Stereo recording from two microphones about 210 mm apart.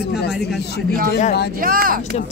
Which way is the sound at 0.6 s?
50° left (ahead or behind).